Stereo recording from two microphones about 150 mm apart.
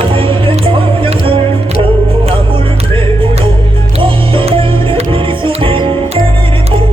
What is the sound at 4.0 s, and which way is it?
Music, 35° right (ahead or behind).